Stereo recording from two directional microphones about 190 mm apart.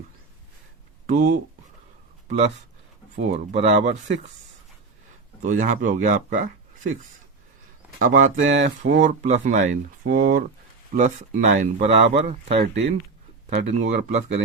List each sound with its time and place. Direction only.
1.0 s speech: 40° right (ahead or behind)
5.4 s speech: 40° right (ahead or behind)
7.9 s speech: 45° right (ahead or behind)